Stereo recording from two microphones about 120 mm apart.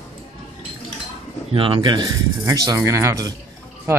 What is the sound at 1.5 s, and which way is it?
Speech, 45° right (ahead or behind).